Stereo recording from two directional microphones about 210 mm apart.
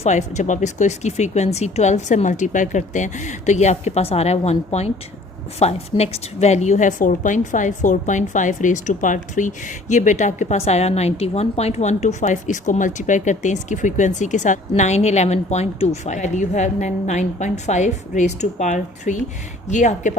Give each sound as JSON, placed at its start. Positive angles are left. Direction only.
{"t": 0.0, "sound": "a woman's voice", "side_deg": 35}